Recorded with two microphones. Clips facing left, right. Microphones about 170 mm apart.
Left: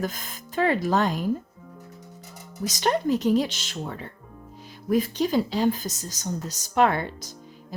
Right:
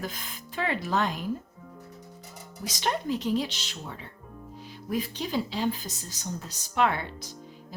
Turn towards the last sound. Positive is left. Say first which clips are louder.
# left 5 dB
turn(degrees=45)  # may be behind; listen again after turning